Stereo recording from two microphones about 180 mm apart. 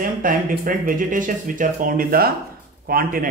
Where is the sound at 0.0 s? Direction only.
50° right (ahead or behind).